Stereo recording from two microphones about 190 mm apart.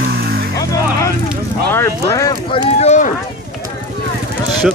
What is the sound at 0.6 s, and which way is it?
Music, 15° left (ahead or behind).